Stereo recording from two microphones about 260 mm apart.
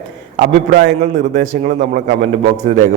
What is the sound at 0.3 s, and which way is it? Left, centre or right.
A man's voice, right.